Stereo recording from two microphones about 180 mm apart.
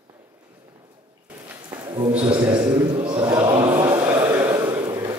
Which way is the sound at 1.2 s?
10° right (ahead or behind).